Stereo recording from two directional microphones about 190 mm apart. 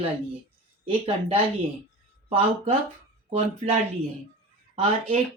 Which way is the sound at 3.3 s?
35° right (ahead or behind).